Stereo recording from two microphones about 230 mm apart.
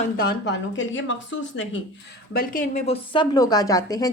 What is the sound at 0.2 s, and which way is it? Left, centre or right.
Speech, left.